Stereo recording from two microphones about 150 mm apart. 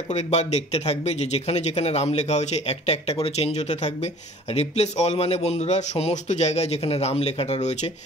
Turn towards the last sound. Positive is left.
turn(degrees=50)  # may be behind; listen again after turning